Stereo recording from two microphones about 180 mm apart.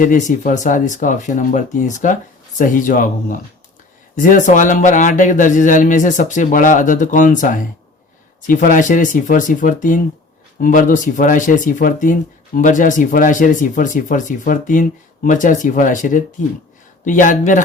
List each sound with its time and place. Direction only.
0.0 s speech: 45° left (ahead or behind)